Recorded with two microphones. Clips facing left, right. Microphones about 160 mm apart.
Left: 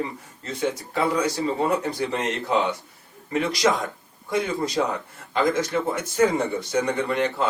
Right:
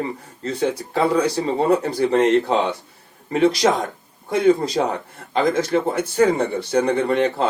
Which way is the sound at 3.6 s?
50° right (ahead or behind).